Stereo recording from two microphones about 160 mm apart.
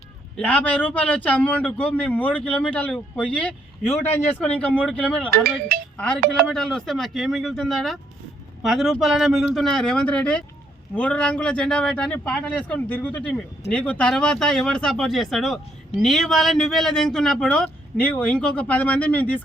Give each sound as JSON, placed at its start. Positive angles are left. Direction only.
{"t": 0.3, "sound": "a man's voice", "side_deg": 10}
{"t": 5.3, "sound": "speech", "side_deg": -70}
{"t": 6.5, "sound": "a man's voice", "side_deg": 5}